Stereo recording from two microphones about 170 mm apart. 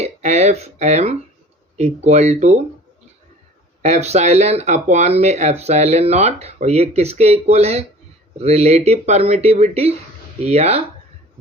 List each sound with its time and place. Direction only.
0.0 s speech: 40° right (ahead or behind)
3.8 s speech: 40° right (ahead or behind)